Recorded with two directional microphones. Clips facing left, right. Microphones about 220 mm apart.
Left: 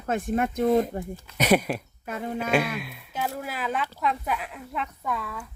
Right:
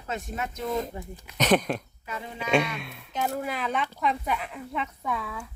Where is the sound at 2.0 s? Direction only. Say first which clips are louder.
Left 8 dB; 55° left (ahead or behind).